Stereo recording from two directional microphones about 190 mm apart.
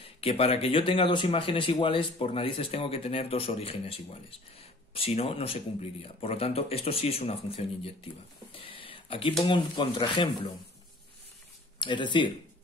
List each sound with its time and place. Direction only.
0.0 s speech: 30° left (ahead or behind)
11.8 s speech: 25° left (ahead or behind)